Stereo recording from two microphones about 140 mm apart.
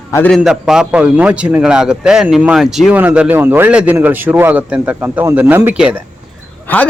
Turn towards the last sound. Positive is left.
turn(degrees=10)  # may be behind; listen again after turning